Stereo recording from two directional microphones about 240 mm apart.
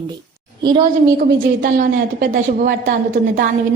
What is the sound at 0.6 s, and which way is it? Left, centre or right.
Speech, centre.